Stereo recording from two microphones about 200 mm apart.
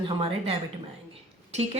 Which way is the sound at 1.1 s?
30° right (ahead or behind).